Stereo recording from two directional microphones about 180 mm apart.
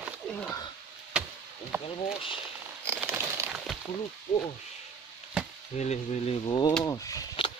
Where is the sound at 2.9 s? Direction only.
10° right (ahead or behind).